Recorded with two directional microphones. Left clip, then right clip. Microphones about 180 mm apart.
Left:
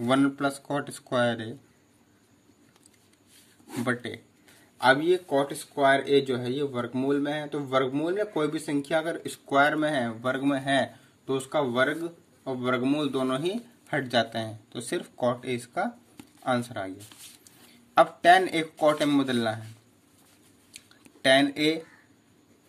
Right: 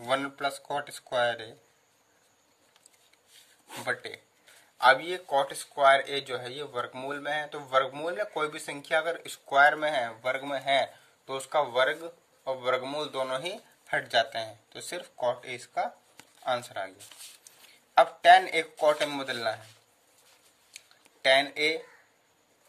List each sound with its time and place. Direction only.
0.0 s speech: 15° left (ahead or behind)
3.8 s speech: 15° left (ahead or behind)
4.7 s speech: 5° left (ahead or behind)
17.9 s speech: 20° left (ahead or behind)
20.7 s a sound: 25° left (ahead or behind)